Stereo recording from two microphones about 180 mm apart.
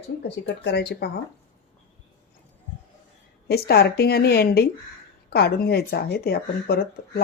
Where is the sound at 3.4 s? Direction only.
60° left (ahead or behind).